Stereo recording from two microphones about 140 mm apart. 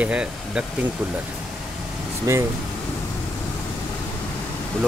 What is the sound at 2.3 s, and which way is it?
Speech, 20° right (ahead or behind).